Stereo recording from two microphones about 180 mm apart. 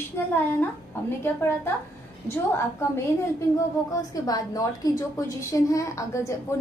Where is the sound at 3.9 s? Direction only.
20° left (ahead or behind).